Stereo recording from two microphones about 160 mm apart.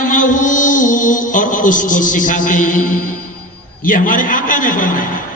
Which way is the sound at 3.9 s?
55° left (ahead or behind).